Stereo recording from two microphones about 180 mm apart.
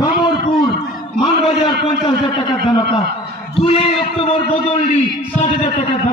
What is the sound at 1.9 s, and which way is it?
Speech, 30° left (ahead or behind).